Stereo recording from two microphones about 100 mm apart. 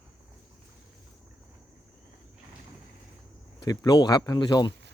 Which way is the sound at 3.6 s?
40° left (ahead or behind).